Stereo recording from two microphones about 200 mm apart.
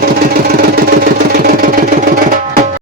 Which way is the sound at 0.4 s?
50° right (ahead or behind).